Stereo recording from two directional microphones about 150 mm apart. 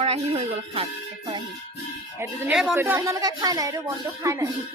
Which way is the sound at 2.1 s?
15° right (ahead or behind).